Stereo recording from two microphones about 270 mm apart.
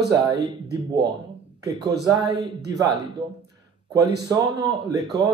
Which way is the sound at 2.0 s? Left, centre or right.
Centre.